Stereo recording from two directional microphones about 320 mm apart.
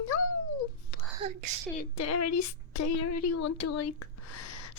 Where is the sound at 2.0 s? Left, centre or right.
Left.